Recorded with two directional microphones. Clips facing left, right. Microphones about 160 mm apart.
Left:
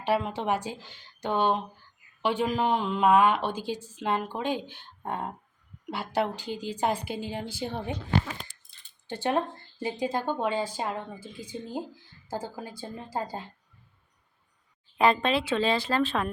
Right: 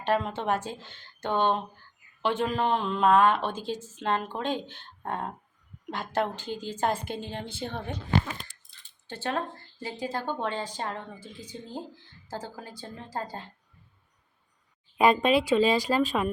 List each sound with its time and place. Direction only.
0.0 s a woman's voice: 10° left (ahead or behind)
9.0 s a woman's voice: 15° left (ahead or behind)
14.9 s speech: 15° right (ahead or behind)